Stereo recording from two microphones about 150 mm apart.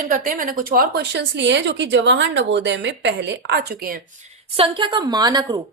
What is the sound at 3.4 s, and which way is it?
Speech, 90° right.